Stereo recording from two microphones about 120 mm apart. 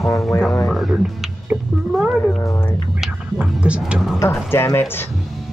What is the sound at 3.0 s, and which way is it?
Whispering, 10° right (ahead or behind).